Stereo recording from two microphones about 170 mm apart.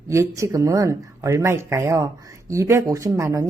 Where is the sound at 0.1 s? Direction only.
15° right (ahead or behind).